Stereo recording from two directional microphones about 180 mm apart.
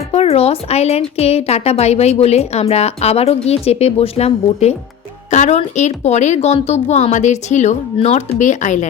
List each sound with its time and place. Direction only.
0.1 s a woman's voice: 35° left (ahead or behind)